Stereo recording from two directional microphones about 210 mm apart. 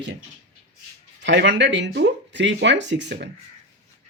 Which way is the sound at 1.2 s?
60° right (ahead or behind).